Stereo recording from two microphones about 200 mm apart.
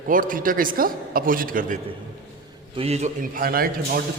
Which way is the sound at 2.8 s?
35° right (ahead or behind).